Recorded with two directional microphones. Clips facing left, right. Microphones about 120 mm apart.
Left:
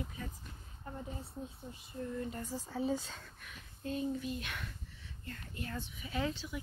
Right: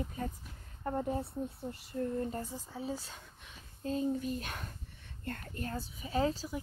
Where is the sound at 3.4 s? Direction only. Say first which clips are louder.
Right 4 dB; 30° right (ahead or behind).